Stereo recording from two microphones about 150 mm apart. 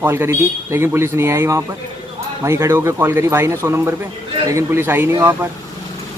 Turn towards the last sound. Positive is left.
turn(degrees=-15)  # may be behind; listen again after turning